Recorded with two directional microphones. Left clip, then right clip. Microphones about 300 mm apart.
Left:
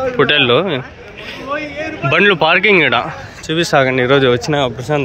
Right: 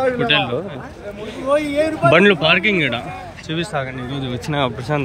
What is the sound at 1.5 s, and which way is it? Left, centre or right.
Speech, right.